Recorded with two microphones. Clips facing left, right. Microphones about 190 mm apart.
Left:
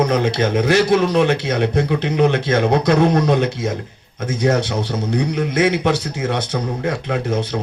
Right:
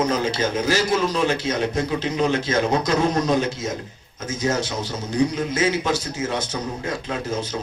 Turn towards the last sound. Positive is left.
turn(degrees=60)  # may be behind; listen again after turning